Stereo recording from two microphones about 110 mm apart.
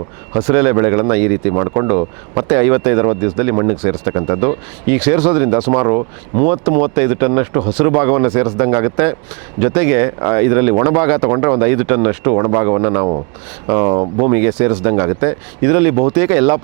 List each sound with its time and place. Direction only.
0.4 s speech: 25° right (ahead or behind)
14.3 s speech: 25° right (ahead or behind)